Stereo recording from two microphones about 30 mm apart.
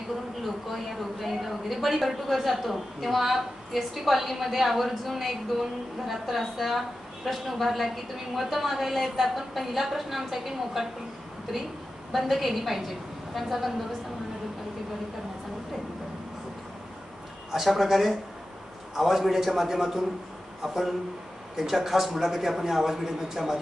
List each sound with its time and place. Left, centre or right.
0.4 s a woman's voice: centre
12.1 s a woman's voice: centre
17.5 s speech: centre
18.9 s speech: centre